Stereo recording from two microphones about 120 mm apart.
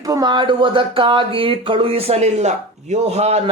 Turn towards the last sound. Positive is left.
turn(degrees=-65)  # may be behind; listen again after turning